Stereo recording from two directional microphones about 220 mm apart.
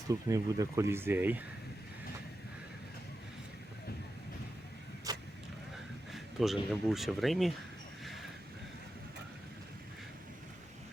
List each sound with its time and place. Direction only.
0.1 s speech: 15° right (ahead or behind)
5.1 s vehicle: 15° right (ahead or behind)
5.7 s speech: centre (ahead or behind)